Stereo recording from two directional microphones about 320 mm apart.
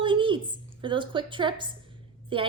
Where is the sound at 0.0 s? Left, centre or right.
Centre.